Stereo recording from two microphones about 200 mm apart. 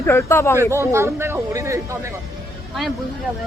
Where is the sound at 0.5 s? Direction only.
15° right (ahead or behind).